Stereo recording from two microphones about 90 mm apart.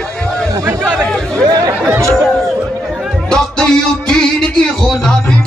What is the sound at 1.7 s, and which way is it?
Chatter, 25° right (ahead or behind).